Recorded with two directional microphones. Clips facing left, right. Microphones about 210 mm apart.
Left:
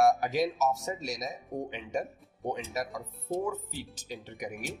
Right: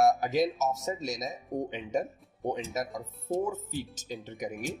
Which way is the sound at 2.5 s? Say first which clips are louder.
Even; 20° right (ahead or behind).